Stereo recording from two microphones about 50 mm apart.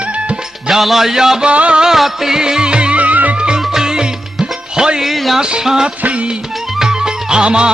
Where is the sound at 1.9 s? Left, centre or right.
Centre; by 3.4 s right.